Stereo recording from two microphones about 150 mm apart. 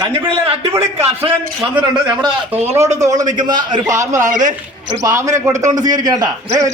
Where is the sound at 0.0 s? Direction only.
35° right (ahead or behind).